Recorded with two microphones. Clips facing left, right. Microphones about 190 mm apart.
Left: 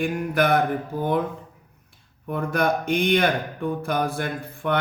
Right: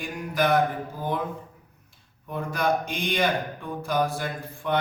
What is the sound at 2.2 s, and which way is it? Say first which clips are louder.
Speech: left 3 dB; 60° left (ahead or behind).